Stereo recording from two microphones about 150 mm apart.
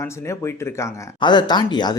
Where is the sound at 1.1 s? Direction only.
30° left (ahead or behind).